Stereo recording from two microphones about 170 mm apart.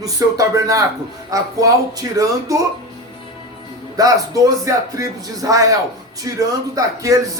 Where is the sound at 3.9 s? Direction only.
20° right (ahead or behind).